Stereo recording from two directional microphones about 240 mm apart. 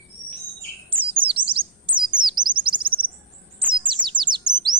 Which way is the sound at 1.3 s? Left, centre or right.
Right.